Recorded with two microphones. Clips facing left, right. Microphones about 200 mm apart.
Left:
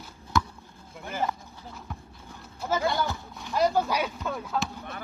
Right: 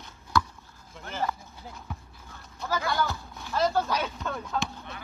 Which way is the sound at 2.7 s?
20° left (ahead or behind).